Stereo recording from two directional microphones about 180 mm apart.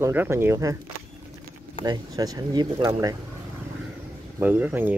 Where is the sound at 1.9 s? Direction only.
20° right (ahead or behind).